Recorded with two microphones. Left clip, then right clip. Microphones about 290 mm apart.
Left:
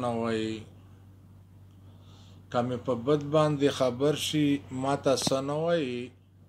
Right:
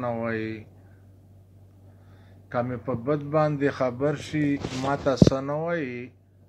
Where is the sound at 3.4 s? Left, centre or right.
Left.